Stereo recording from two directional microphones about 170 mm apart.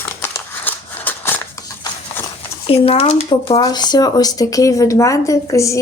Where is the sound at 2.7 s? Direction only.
35° left (ahead or behind).